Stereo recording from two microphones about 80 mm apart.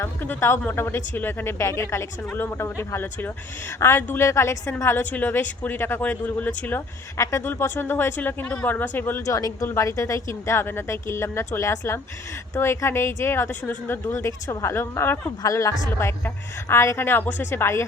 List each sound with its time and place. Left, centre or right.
0.0 s speech: left
7.2 s speech: left
7.4 s speech: left
9.2 s speech: left
14.7 s speech: left
15.4 s speech: left